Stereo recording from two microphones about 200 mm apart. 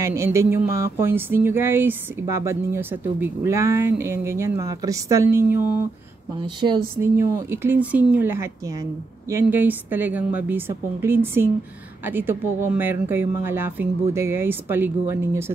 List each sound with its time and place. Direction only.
0.0 s speech: 15° right (ahead or behind)
6.4 s speech: 20° right (ahead or behind)